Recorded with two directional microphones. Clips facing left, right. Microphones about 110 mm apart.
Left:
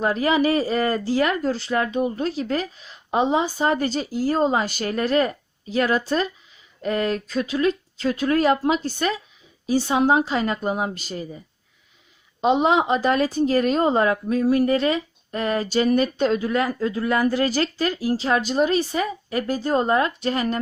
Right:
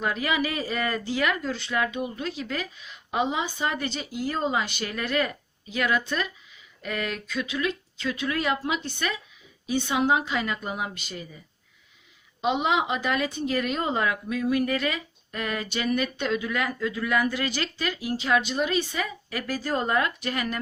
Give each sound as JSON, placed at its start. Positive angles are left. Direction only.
{"t": 0.0, "sound": "speech", "side_deg": 35}
{"t": 12.4, "sound": "speech", "side_deg": 40}